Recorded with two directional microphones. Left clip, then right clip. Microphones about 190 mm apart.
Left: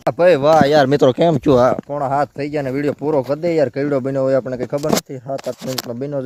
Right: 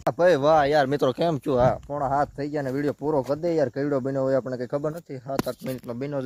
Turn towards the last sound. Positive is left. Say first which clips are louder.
# left 7 dB
turn(degrees=0)  # may be behind; listen again after turning